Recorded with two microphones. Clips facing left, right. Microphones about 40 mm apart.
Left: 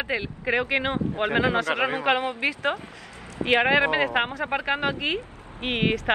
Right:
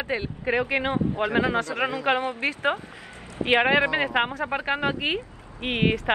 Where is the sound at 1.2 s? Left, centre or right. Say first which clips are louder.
Left 2 dB; left.